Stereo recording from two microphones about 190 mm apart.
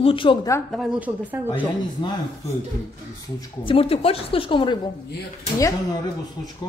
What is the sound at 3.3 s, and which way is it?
A woman's voice, 25° left (ahead or behind).